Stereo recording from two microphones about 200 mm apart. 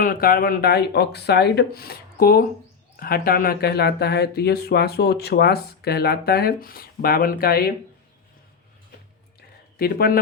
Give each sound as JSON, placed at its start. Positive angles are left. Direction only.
{"t": 0.0, "sound": "speech", "side_deg": 45}
{"t": 9.7, "sound": "speech", "side_deg": 50}